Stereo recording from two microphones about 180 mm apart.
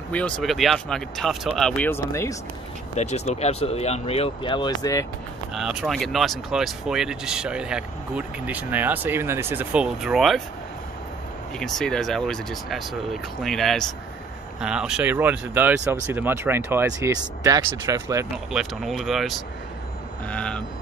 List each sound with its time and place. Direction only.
0.1 s speech: 5° left (ahead or behind)
3.0 s speech: 40° left (ahead or behind); by 5.0 s 20° left (ahead or behind)
5.5 s speech: centre (ahead or behind)
11.6 s speech: 5° left (ahead or behind); by 18.2 s 15° right (ahead or behind)
18.5 s speech: centre (ahead or behind)
20.2 s a sound: 5° left (ahead or behind)